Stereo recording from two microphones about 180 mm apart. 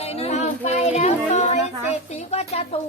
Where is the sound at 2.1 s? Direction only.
35° left (ahead or behind).